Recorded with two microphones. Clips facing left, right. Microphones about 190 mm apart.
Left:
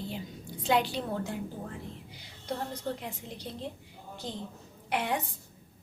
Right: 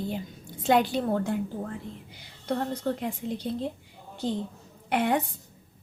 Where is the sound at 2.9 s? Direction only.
60° right (ahead or behind).